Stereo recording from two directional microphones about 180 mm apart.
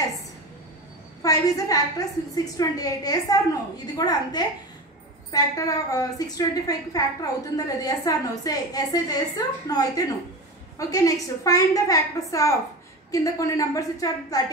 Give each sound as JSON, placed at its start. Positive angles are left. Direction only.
{"t": 1.2, "sound": "a woman's voice", "side_deg": 20}